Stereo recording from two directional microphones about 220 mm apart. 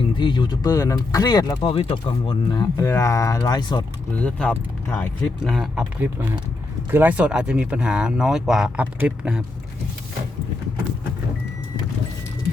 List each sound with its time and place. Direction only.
0.2 s speech: 20° left (ahead or behind)
4.2 s speech: 5° left (ahead or behind)